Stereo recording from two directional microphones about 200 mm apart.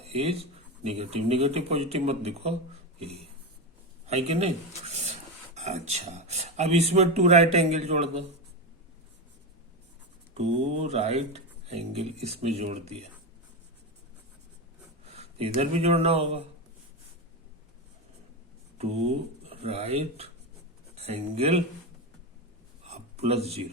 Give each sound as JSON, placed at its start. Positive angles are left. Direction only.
{"t": 0.0, "sound": "speech", "side_deg": -30}
{"t": 4.0, "sound": "speech", "side_deg": -30}
{"t": 10.3, "sound": "speech", "side_deg": -30}
{"t": 15.0, "sound": "speech", "side_deg": -30}
{"t": 19.5, "sound": "speech", "side_deg": -30}
{"t": 22.8, "sound": "a sound", "side_deg": -30}